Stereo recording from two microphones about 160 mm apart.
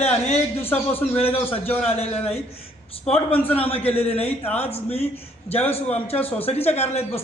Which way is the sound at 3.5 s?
10° left (ahead or behind).